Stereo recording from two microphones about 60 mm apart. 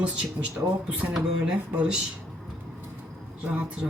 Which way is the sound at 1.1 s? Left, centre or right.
Centre.